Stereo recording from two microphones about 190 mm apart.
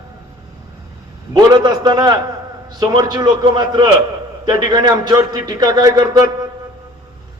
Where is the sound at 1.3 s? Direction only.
20° right (ahead or behind).